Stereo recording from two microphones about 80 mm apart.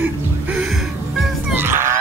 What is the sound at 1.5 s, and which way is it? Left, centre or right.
Music, right.